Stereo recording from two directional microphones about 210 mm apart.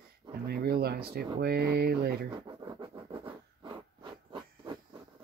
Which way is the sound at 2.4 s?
20° right (ahead or behind).